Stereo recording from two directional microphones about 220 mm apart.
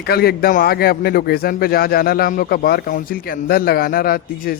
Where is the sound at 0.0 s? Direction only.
45° left (ahead or behind).